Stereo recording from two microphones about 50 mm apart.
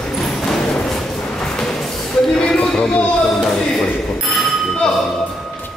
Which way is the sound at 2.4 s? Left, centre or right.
Centre.